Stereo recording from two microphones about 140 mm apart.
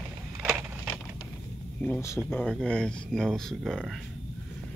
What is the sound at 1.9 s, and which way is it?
Speech, 20° left (ahead or behind).